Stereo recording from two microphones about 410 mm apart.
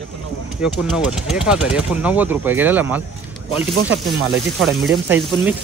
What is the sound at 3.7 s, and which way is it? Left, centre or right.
Speech, right.